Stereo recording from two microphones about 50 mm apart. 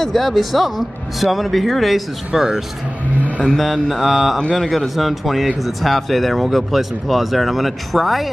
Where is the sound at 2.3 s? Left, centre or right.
Centre.